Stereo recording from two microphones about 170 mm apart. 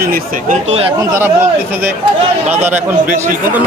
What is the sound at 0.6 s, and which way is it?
Speech, 35° right (ahead or behind).